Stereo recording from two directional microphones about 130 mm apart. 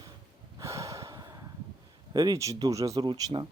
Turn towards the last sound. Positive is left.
turn(degrees=-35)  # may be behind; listen again after turning